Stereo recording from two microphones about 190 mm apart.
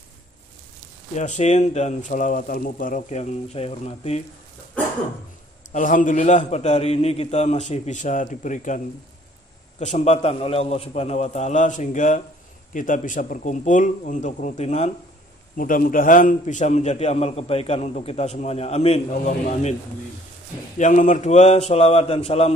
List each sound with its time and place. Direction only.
1.1 s a man's voice: 40° left (ahead or behind)
5.7 s a man's voice: 45° left (ahead or behind)
20.7 s a man's voice: 40° left (ahead or behind)